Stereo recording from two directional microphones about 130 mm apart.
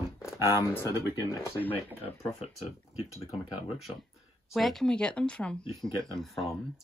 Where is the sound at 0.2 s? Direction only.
20° left (ahead or behind).